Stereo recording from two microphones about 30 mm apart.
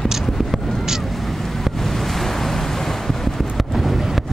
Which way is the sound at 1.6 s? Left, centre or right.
Centre.